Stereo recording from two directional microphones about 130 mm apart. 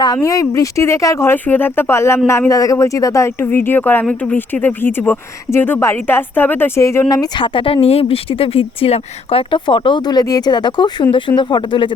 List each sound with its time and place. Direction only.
0.2 s speech: 25° left (ahead or behind)